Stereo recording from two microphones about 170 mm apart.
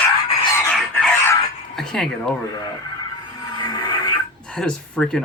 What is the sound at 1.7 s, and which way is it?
Speech, centre (ahead or behind).